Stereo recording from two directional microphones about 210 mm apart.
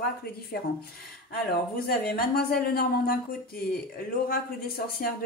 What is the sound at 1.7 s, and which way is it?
Speech, 45° left (ahead or behind).